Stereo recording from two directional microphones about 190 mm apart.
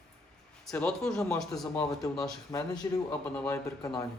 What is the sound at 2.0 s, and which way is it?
Speech, 15° left (ahead or behind).